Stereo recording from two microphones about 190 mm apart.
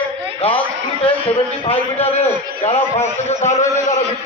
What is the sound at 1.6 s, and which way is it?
A man's voice, 30° left (ahead or behind).